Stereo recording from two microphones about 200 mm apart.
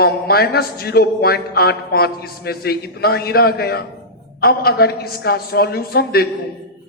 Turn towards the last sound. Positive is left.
turn(degrees=50)  # may be behind; listen again after turning